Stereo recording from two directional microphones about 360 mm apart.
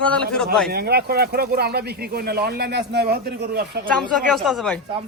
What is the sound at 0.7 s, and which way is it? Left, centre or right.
Speech, right.